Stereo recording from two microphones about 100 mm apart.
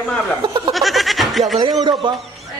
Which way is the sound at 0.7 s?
Centre (ahead or behind).